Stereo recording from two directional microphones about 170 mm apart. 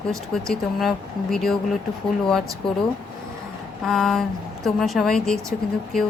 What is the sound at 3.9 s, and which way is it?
A woman's voice, centre (ahead or behind).